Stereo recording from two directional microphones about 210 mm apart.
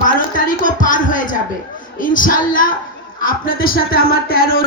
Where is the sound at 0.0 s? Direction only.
40° left (ahead or behind).